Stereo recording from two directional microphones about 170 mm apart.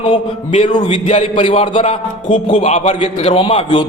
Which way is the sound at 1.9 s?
45° left (ahead or behind).